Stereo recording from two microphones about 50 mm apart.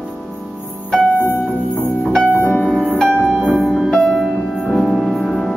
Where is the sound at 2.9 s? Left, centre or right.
Centre.